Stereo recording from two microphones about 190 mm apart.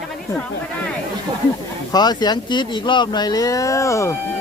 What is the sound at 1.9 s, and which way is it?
Speech, 20° left (ahead or behind).